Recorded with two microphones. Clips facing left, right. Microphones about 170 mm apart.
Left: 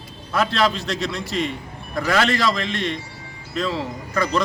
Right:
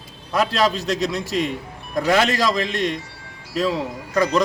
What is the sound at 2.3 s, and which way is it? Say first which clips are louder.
Speech: right 1 dB; 40° right (ahead or behind).